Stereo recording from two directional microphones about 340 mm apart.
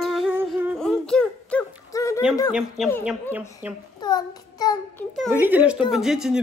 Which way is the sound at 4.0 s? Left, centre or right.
Centre.